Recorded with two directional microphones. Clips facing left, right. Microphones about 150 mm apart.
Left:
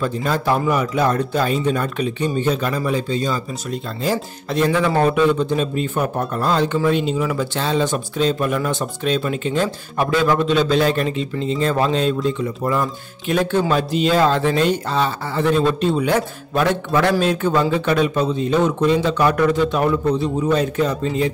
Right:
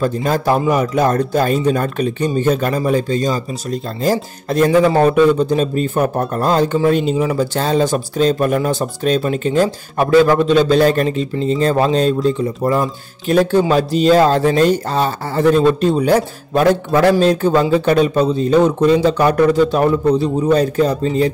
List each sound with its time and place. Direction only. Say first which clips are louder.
0.0 s a man's voice: right 4 dB; 40° right (ahead or behind)